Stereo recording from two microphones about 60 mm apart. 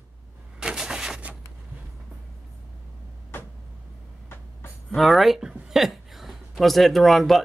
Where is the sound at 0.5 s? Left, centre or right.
Centre.